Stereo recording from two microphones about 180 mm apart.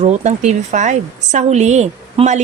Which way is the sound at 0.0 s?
40° right (ahead or behind).